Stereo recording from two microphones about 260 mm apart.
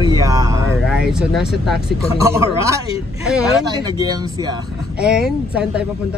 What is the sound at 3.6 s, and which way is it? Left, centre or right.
Speech, centre.